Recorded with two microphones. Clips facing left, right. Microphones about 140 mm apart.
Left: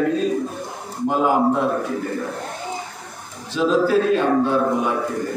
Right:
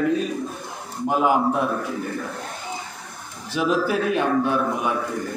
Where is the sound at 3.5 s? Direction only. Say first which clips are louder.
Left 4 dB; 15° right (ahead or behind).